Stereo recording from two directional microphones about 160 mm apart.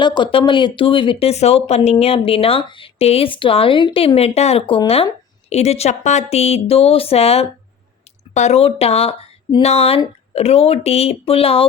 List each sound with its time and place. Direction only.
0.0 s speech: 30° left (ahead or behind)